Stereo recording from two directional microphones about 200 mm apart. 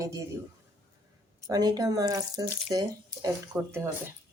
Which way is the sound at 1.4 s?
20° right (ahead or behind).